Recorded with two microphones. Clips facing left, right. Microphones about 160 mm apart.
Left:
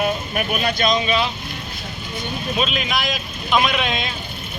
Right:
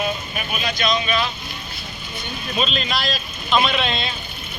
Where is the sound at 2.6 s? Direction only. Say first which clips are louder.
Even; 5° left (ahead or behind).